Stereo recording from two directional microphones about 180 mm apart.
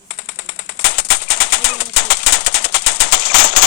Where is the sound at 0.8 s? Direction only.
65° left (ahead or behind).